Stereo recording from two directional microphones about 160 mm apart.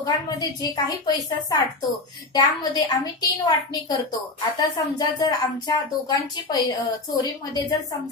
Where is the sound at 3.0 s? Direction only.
25° left (ahead or behind).